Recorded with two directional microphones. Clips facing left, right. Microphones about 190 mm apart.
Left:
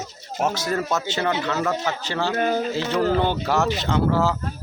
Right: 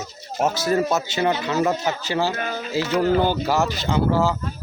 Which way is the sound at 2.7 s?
5° right (ahead or behind).